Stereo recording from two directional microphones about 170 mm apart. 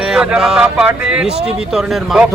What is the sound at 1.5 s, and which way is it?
Speech, 5° right (ahead or behind).